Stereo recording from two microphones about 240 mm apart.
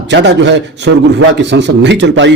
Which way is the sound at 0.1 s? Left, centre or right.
Right.